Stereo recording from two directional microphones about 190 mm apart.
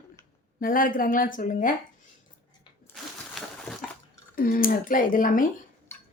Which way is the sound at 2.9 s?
10° left (ahead or behind).